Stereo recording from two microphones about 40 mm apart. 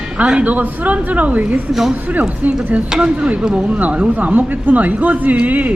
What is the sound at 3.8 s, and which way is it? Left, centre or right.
Speech, right.